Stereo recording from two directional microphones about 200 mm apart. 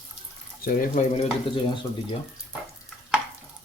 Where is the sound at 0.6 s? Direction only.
40° left (ahead or behind).